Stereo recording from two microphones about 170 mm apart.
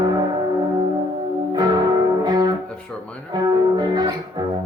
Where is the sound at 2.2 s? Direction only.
25° right (ahead or behind).